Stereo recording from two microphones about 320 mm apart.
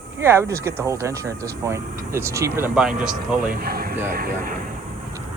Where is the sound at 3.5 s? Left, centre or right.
Right.